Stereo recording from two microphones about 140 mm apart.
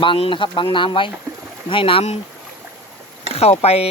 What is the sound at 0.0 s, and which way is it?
Speech, 40° left (ahead or behind).